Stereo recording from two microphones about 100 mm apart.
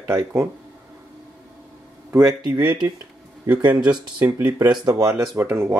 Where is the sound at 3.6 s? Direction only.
45° right (ahead or behind).